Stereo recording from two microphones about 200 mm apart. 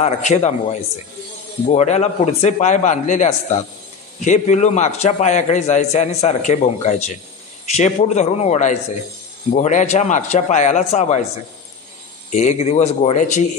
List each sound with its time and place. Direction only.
0.0 s a man's voice: 35° left (ahead or behind)
12.3 s a man's voice: 35° left (ahead or behind)